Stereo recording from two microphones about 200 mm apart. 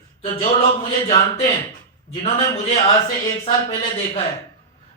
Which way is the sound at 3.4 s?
25° left (ahead or behind).